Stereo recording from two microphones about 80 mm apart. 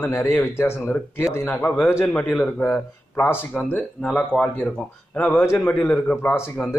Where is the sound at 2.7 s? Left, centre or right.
Left; by 5.2 s centre.